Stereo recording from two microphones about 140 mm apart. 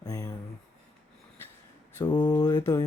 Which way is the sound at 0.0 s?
25° left (ahead or behind).